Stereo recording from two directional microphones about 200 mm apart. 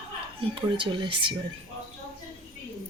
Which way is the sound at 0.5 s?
25° right (ahead or behind).